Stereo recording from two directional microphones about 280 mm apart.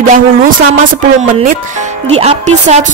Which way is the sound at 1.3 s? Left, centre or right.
Right.